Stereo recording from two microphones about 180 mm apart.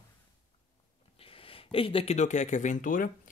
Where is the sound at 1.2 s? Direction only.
30° left (ahead or behind).